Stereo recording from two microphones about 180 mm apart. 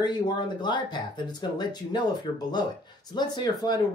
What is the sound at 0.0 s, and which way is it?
Speech, 25° left (ahead or behind).